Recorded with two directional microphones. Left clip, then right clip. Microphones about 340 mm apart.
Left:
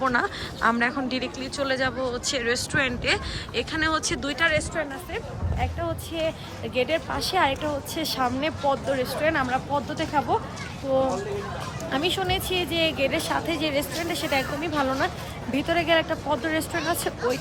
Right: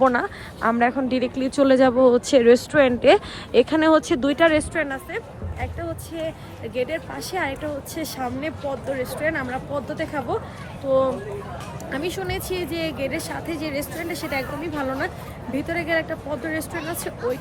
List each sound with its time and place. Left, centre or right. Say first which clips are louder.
0.0 s a woman's voice: right 4 dB; centre
6.7 s speech: left 2 dB; centre
11.9 s a woman's voice: left 3 dB; centre